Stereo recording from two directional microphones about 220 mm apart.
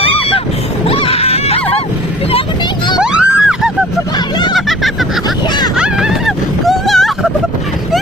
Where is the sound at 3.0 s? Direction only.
5° right (ahead or behind).